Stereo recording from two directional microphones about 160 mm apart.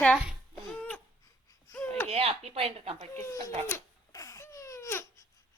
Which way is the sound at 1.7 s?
20° left (ahead or behind).